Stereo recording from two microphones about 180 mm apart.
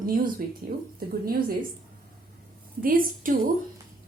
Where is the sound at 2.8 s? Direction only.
50° right (ahead or behind).